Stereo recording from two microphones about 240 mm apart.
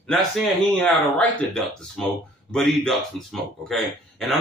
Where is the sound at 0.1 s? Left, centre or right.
Centre.